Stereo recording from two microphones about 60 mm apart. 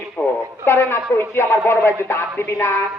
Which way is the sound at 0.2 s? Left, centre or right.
Left.